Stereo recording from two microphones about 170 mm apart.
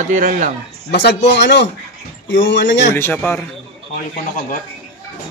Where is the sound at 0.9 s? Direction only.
90° left.